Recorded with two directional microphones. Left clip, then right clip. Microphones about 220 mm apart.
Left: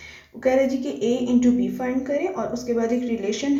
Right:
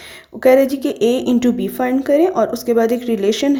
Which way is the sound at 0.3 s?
45° right (ahead or behind).